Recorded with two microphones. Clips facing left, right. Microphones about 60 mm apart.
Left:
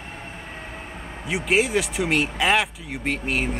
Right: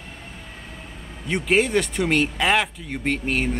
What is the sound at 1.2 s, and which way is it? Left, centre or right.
Speech, centre.